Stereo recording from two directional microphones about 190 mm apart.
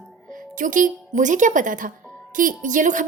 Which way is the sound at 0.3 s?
45° right (ahead or behind).